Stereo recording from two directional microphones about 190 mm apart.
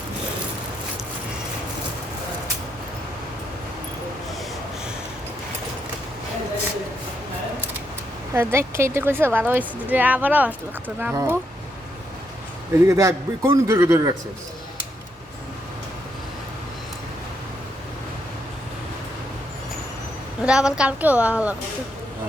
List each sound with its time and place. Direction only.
8.3 s a woman's voice: 15° right (ahead or behind)
12.9 s a woman's voice: 15° right (ahead or behind)
20.4 s a woman's voice: 5° right (ahead or behind)